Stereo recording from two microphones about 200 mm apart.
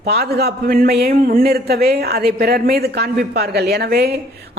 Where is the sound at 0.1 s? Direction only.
50° right (ahead or behind).